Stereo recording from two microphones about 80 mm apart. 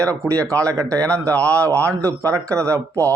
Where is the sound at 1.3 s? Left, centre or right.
Centre.